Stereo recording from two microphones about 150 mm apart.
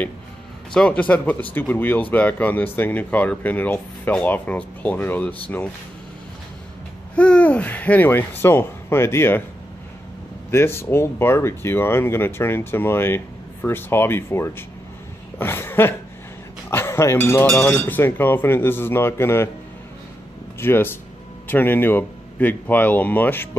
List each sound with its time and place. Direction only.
0.7 s speech: 10° left (ahead or behind)
7.2 s speech: 10° left (ahead or behind)
10.5 s speech: 15° left (ahead or behind)
15.3 s cough: 15° left (ahead or behind)
16.7 s speech: 15° left (ahead or behind)
20.5 s speech: 15° left (ahead or behind)